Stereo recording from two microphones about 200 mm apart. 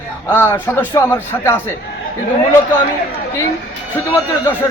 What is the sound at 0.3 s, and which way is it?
A man's voice, 10° left (ahead or behind).